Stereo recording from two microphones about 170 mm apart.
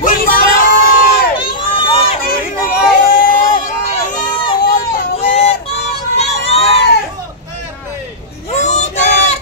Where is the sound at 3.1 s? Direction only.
55° left (ahead or behind).